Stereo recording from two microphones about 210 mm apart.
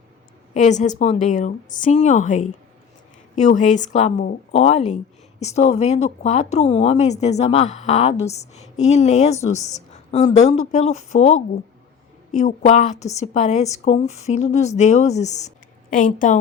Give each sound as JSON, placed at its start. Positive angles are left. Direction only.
{"t": 0.5, "sound": "speech", "side_deg": 35}